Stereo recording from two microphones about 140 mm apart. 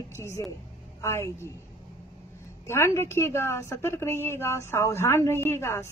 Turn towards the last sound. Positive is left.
turn(degrees=20)  # may be behind; listen again after turning